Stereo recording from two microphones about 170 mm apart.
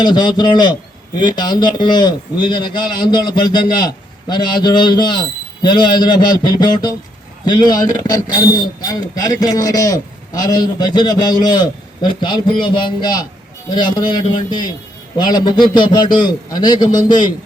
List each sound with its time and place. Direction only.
0.0 s a man's voice: 25° left (ahead or behind)